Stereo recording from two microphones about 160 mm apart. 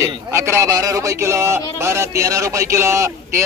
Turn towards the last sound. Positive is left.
turn(degrees=-20)  # may be behind; listen again after turning